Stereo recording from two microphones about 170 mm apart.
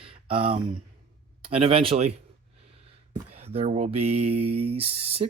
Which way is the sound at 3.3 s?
35° right (ahead or behind).